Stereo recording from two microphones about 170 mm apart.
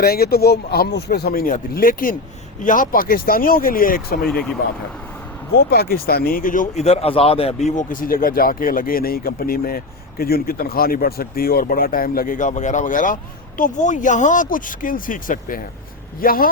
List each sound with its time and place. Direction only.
0.0 s speech: 65° left (ahead or behind)
4.3 s speech: 5° left (ahead or behind)
5.7 s speech: 65° left (ahead or behind)